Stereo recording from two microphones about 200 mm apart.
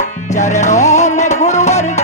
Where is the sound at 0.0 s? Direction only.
35° left (ahead or behind).